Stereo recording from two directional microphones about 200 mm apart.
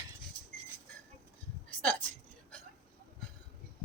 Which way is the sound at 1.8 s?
5° left (ahead or behind).